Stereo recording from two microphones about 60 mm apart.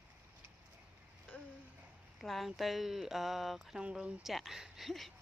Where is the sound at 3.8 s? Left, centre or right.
Centre.